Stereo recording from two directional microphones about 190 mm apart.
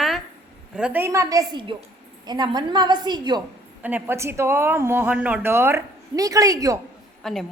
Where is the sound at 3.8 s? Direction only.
10° right (ahead or behind).